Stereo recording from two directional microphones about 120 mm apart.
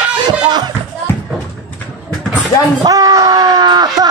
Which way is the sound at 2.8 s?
30° right (ahead or behind).